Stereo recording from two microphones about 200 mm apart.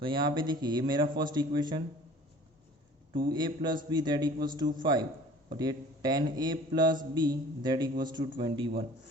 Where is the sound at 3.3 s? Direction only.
20° right (ahead or behind).